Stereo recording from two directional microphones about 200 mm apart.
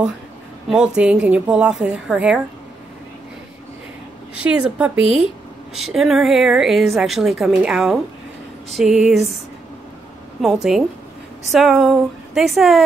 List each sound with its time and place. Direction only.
0.7 s a woman's voice: 5° right (ahead or behind)
4.4 s a woman's voice: 5° right (ahead or behind)
5.0 s speech: 25° left (ahead or behind)
5.8 s a woman's voice: centre (ahead or behind)
10.4 s a woman's voice: centre (ahead or behind)